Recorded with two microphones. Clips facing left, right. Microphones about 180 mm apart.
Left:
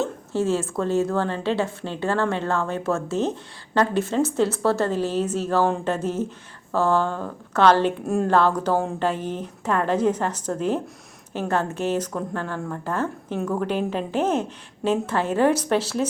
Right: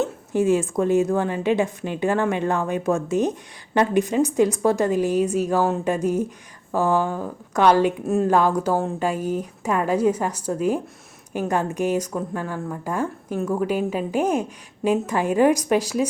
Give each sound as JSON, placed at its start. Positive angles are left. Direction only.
{"t": 0.0, "sound": "a woman's voice", "side_deg": -15}